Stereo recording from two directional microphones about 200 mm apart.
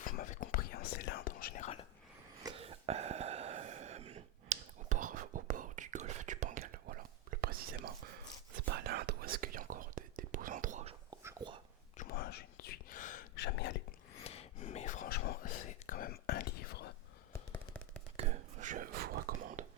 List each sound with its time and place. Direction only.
0.0 s whispering: 45° left (ahead or behind)
2.6 s a sound: 30° right (ahead or behind); by 7.8 s 50° right (ahead or behind)
8.7 s whispering: 50° right (ahead or behind)
11.2 s whispering: 15° right (ahead or behind)
11.9 s whispering: 45° left (ahead or behind)
14.3 s whispering: 30° left (ahead or behind); by 16.9 s 50° left (ahead or behind)
18.2 s whispering: 35° right (ahead or behind)